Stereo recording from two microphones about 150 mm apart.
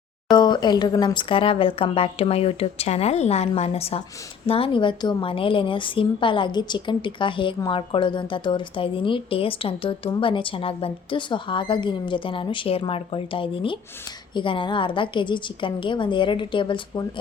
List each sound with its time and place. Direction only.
0.3 s speech: 30° left (ahead or behind)